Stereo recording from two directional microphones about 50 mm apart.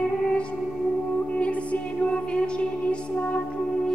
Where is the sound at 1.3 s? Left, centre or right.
Left.